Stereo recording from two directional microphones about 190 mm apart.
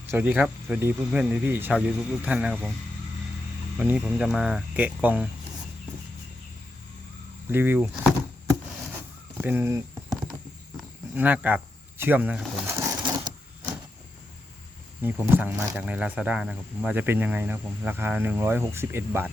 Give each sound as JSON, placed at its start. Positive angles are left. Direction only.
{"t": 0.1, "sound": "speech", "side_deg": -10}
{"t": 3.8, "sound": "speech", "side_deg": -5}
{"t": 7.5, "sound": "speech", "side_deg": -10}
{"t": 9.4, "sound": "a sound", "side_deg": -10}
{"t": 10.8, "sound": "speech", "side_deg": -10}
{"t": 12.6, "sound": "sewing machine", "side_deg": -15}
{"t": 15.0, "sound": "speech", "side_deg": -10}